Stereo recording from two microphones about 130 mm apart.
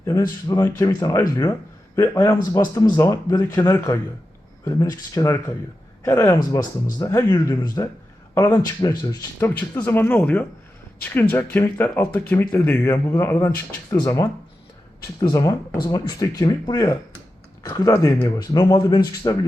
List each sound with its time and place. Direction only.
0.0 s speech: 25° left (ahead or behind)
9.8 s speech: 15° left (ahead or behind)